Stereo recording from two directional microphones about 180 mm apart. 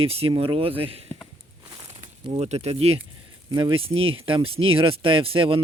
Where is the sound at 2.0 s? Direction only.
35° right (ahead or behind).